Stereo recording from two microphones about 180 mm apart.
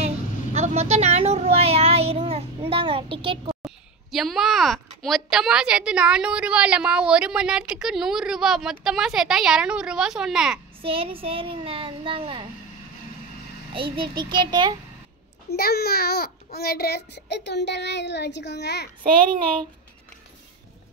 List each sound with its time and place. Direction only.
0.0 s speech: 35° right (ahead or behind)
3.6 s a woman's voice: centre (ahead or behind)
10.8 s a child's voice: 30° right (ahead or behind)
13.7 s a child's voice: 30° right (ahead or behind)
15.5 s a child's voice: 60° left (ahead or behind)